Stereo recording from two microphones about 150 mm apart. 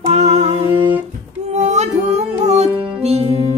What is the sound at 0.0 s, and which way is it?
Music, 45° right (ahead or behind).